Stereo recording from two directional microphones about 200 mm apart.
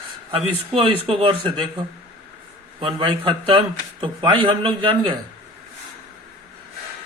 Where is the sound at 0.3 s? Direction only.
30° right (ahead or behind).